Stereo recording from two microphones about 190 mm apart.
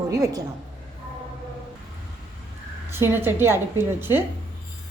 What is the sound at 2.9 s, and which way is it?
A woman's voice, 10° right (ahead or behind).